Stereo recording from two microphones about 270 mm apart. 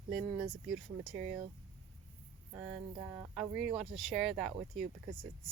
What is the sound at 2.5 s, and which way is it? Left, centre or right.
Speech, centre.